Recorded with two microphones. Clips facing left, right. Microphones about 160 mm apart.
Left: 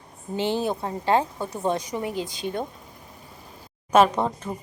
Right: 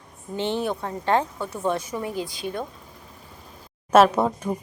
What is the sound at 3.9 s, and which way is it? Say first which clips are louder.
Speech: right 2 dB; 5° right (ahead or behind).